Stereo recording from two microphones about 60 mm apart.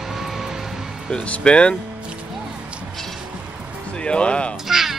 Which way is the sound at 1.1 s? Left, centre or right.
Centre.